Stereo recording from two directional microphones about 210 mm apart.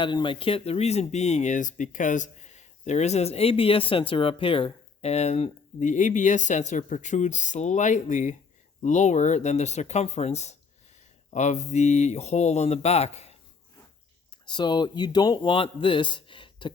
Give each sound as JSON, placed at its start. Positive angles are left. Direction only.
{"t": 0.0, "sound": "speech", "side_deg": 20}
{"t": 14.4, "sound": "speech", "side_deg": 20}